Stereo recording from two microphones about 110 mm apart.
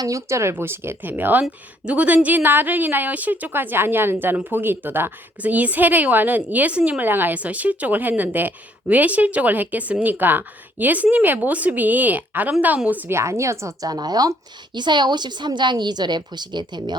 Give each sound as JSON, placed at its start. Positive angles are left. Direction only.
{"t": 0.0, "sound": "speech", "side_deg": -30}